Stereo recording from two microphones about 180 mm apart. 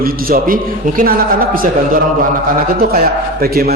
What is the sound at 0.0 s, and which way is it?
A man's voice, 55° right (ahead or behind).